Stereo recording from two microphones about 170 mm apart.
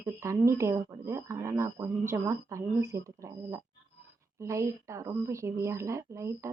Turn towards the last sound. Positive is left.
turn(degrees=-15)  # may be behind; listen again after turning